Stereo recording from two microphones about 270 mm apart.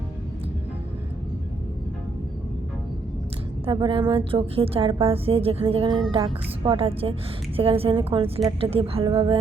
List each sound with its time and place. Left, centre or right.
3.7 s a woman's voice: centre